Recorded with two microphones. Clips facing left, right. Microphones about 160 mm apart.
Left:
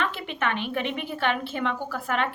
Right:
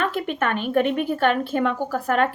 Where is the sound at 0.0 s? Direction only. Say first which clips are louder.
Right 5 dB; 45° right (ahead or behind).